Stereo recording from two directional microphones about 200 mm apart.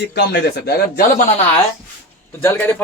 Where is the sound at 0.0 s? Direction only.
55° left (ahead or behind).